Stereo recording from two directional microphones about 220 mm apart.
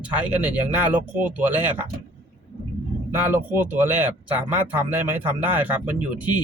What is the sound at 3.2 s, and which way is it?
Speech, 10° right (ahead or behind).